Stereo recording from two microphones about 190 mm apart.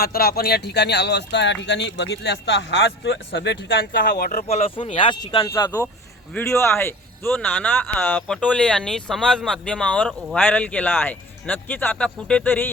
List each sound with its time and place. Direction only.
0.0 s speech: 55° left (ahead or behind)
4.4 s speech: 30° left (ahead or behind); by 12.7 s 10° left (ahead or behind)